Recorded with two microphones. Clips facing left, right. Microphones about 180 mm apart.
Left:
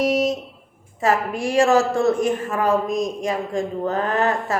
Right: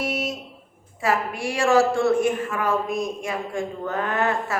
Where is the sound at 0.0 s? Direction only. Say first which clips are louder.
Left 8 dB; 40° left (ahead or behind).